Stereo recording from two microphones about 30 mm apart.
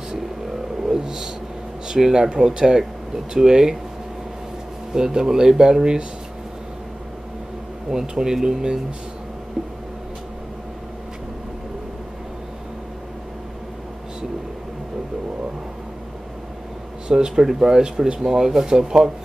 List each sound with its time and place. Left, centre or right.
0.8 s speech: right
4.9 s speech: right
8.1 s speech: right
17.1 s speech: right
18.2 s speech: centre